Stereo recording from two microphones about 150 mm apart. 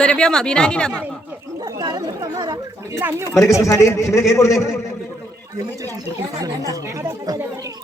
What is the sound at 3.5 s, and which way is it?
A man's voice, 20° left (ahead or behind).